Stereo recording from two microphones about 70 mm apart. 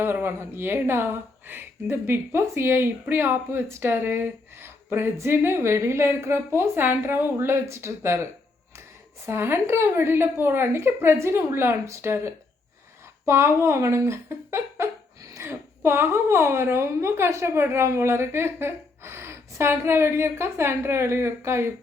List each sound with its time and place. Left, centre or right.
0.0 s speech: right
9.2 s speech: right
15.2 s a sound: right
15.4 s speech: right